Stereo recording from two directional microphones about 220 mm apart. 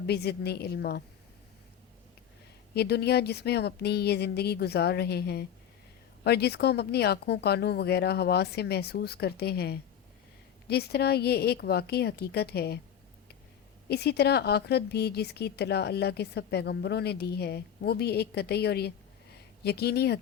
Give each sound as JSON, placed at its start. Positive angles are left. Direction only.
{"t": 0.0, "sound": "a woman's voice", "side_deg": 50}
{"t": 2.7, "sound": "a woman's voice", "side_deg": 50}
{"t": 13.8, "sound": "a woman's voice", "side_deg": 50}